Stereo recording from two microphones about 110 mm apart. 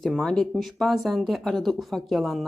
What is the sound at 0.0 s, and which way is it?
Speech, 5° left (ahead or behind).